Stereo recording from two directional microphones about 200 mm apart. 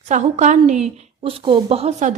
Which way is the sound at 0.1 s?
35° right (ahead or behind).